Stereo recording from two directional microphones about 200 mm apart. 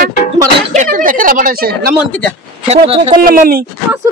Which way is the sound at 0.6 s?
40° right (ahead or behind).